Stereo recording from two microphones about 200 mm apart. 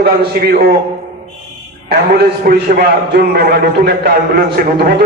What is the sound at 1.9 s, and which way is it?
A man's voice, 50° right (ahead or behind).